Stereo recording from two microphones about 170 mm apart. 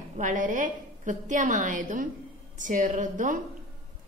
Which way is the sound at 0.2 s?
50° right (ahead or behind).